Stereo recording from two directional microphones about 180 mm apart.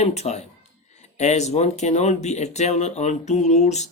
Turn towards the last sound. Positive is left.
turn(degrees=40)  # may be behind; listen again after turning